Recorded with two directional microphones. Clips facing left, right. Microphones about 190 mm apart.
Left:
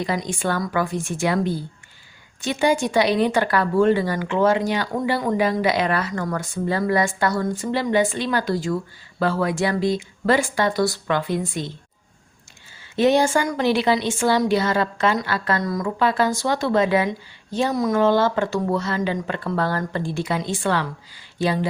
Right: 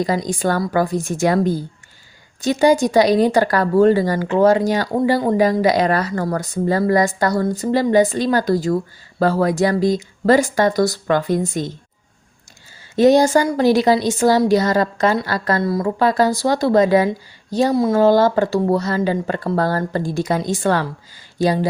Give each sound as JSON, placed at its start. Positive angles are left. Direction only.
{"t": 0.0, "sound": "speech", "side_deg": -40}
{"t": 13.0, "sound": "speech", "side_deg": -40}